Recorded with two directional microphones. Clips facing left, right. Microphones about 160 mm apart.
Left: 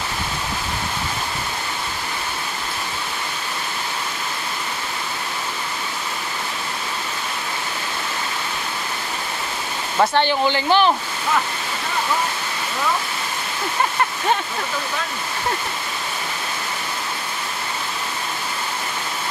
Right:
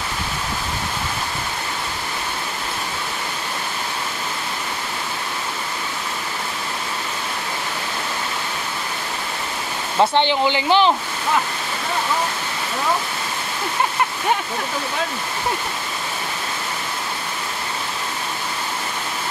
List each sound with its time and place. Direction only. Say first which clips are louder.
9.9 s speech: right 1 dB; 20° right (ahead or behind)